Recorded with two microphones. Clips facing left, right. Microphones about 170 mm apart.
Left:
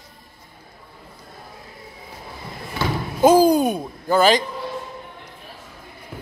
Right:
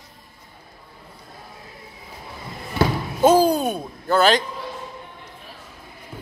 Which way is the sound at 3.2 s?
10° left (ahead or behind).